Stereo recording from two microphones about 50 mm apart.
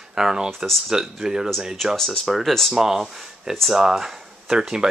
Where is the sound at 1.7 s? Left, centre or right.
Centre.